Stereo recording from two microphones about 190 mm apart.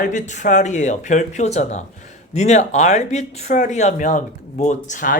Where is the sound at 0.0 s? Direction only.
40° left (ahead or behind).